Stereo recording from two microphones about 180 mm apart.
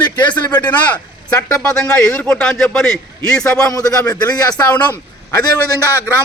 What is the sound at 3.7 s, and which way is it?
Speech, 20° left (ahead or behind).